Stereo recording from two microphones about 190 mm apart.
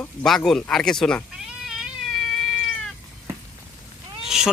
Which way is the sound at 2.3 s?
Centre (ahead or behind).